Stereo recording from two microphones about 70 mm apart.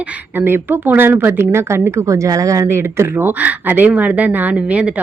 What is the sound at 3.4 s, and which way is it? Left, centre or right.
Speech, right.